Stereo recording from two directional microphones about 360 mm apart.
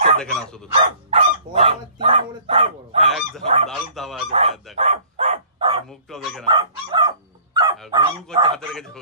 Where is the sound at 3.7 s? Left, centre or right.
Centre.